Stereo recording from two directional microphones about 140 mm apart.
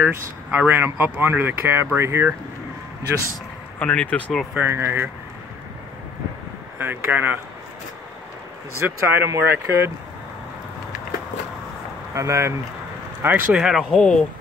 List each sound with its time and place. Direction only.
0.0 s speech: 10° right (ahead or behind)
3.8 s speech: 10° left (ahead or behind)
4.6 s speech: 15° right (ahead or behind)
6.8 s speech: 15° right (ahead or behind)
8.8 s speech: 15° right (ahead or behind)
12.1 s speech: 20° right (ahead or behind)
13.2 s speech: 10° right (ahead or behind)